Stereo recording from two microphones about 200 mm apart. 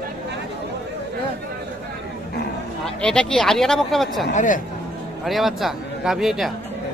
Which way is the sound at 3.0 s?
5° left (ahead or behind).